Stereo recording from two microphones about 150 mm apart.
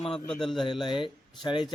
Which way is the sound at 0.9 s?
30° left (ahead or behind).